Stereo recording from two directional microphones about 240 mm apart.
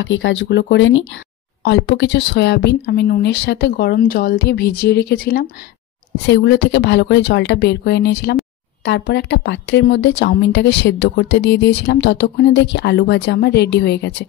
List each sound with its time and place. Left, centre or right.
0.0 s a woman's voice: left